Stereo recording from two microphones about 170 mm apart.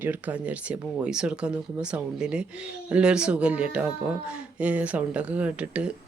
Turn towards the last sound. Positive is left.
turn(degrees=-5)  # may be behind; listen again after turning